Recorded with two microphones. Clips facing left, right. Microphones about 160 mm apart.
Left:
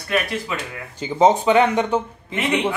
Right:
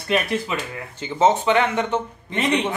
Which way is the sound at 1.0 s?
15° left (ahead or behind).